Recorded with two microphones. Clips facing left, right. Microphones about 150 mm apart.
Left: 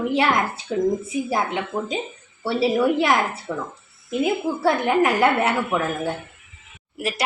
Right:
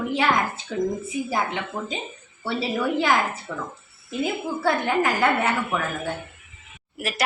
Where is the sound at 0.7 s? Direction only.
15° left (ahead or behind).